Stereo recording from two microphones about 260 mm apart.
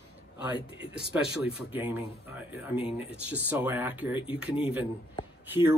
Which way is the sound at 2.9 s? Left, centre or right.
Left.